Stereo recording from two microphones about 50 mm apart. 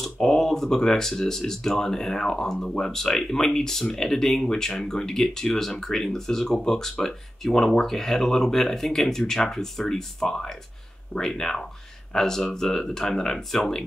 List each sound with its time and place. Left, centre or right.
0.0 s speech: centre